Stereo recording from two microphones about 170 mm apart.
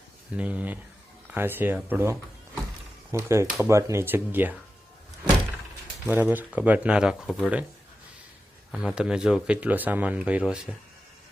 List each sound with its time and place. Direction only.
0.3 s speech: 10° right (ahead or behind)
6.1 s speech: 10° right (ahead or behind)
8.7 s speech: 5° right (ahead or behind)